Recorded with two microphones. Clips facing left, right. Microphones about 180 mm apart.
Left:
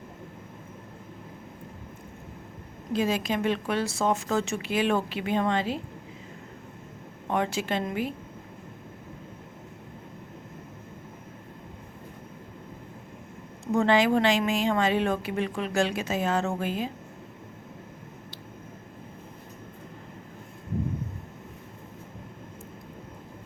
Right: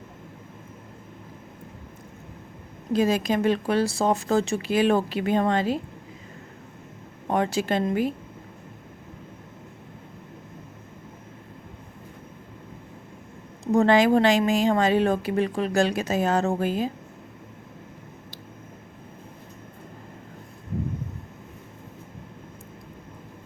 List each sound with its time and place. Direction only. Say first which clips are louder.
2.9 s speech: right 4 dB; 40° right (ahead or behind)
7.3 s speech: right 4 dB; 40° right (ahead or behind)
13.7 s speech: right 4 dB; 40° right (ahead or behind)